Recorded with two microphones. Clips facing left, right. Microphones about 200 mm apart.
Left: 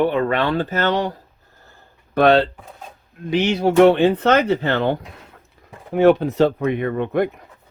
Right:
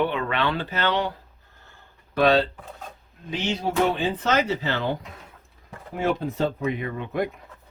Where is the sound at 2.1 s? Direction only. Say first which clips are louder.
Left 5 dB; 55° left (ahead or behind).